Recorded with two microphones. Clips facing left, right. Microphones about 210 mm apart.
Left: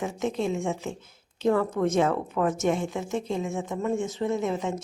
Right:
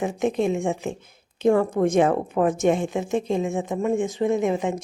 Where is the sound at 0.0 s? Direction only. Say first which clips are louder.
Right 5 dB; 15° right (ahead or behind).